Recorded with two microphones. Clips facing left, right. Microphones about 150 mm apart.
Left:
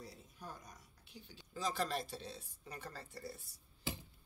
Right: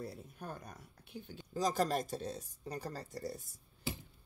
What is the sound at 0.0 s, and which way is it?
Speech, 60° right (ahead or behind).